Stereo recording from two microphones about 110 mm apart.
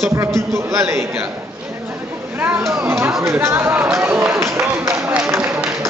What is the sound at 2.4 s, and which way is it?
A man's voice, 20° right (ahead or behind).